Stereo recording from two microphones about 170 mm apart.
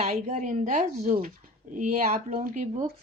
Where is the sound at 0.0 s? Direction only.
40° right (ahead or behind).